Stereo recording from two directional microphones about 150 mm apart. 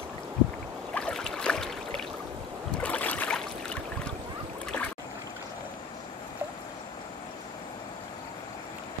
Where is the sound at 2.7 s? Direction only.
10° left (ahead or behind).